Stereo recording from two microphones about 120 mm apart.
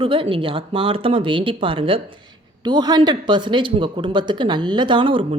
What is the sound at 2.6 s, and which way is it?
Speech, 35° right (ahead or behind).